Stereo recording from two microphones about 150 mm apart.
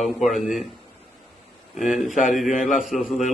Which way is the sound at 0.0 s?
Centre (ahead or behind).